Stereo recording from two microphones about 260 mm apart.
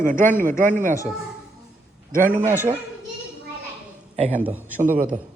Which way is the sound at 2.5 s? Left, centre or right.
Centre.